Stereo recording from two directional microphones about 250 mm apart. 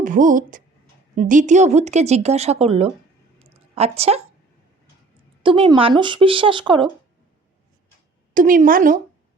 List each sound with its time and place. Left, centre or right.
0.0 s speech: right
3.3 s a sound: right
5.4 s speech: centre
8.3 s a woman's voice: right